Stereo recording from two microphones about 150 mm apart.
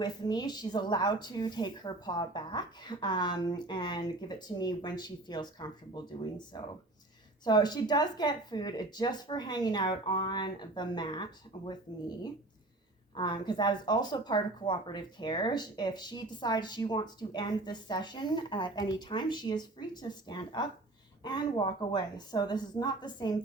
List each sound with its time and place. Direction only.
0.0 s speech: 30° left (ahead or behind)